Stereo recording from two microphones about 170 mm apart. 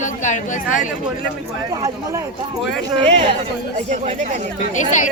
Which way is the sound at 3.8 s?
45° right (ahead or behind).